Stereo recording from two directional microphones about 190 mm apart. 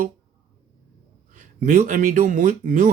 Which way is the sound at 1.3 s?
40° right (ahead or behind).